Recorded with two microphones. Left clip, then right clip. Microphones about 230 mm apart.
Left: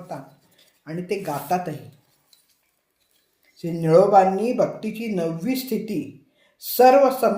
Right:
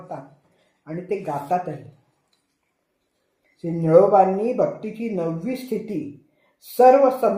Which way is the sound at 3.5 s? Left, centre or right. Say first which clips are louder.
Right 1 dB; left.